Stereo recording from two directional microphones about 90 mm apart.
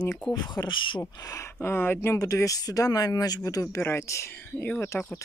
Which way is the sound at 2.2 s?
40° left (ahead or behind).